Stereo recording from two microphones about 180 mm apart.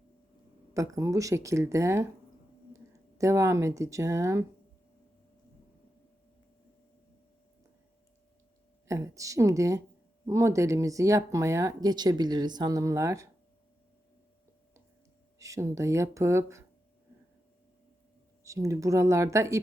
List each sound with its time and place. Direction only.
0.7 s speech: 15° right (ahead or behind)
8.9 s speech: 15° right (ahead or behind)
15.4 s speech: 15° right (ahead or behind)
18.4 s speech: 15° right (ahead or behind)